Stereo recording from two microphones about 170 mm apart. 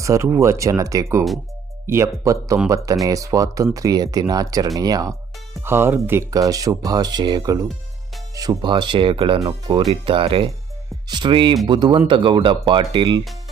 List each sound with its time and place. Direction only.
0.0 s speech: 20° right (ahead or behind)